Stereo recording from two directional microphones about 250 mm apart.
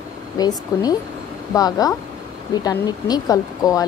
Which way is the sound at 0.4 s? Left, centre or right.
Centre.